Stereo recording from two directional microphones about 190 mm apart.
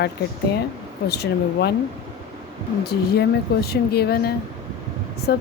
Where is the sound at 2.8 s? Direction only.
55° left (ahead or behind).